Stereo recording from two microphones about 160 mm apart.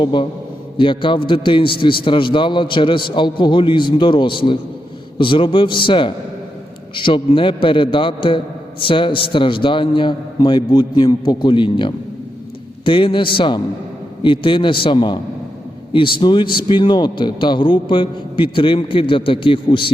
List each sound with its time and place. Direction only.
0.0 s a man's voice: 30° left (ahead or behind)